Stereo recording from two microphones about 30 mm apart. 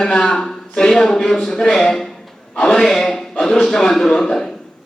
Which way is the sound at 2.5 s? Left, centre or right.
Centre.